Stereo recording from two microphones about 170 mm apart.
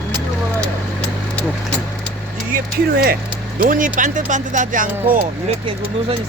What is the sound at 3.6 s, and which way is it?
Speech, 55° right (ahead or behind).